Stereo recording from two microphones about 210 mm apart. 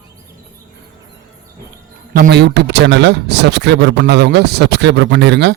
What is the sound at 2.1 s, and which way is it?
A man's voice, 50° right (ahead or behind).